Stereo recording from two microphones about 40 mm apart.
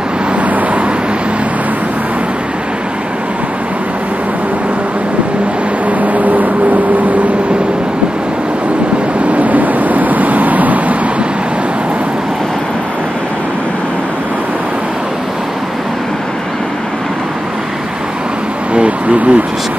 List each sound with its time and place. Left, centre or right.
0.5 s vehicle: right
5.9 s vehicle: right
9.3 s vehicle: right
18.7 s a sound: right